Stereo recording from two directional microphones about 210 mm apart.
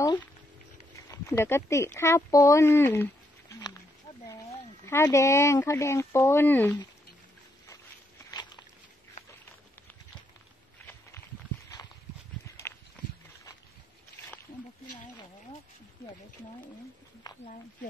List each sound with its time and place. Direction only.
1.0 s speech: 15° left (ahead or behind)
8.3 s walk: 20° left (ahead or behind)